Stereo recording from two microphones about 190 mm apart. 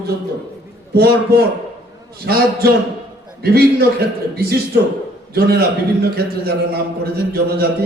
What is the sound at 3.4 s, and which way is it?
A man's voice, 55° right (ahead or behind).